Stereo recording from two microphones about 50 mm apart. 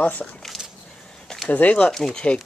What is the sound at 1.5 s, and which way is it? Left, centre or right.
Speech, left.